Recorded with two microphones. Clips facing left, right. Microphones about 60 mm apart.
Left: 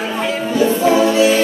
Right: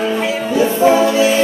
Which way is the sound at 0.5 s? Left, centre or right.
Right.